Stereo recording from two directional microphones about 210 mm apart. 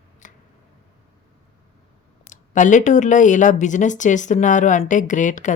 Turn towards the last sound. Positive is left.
turn(degrees=35)  # may be behind; listen again after turning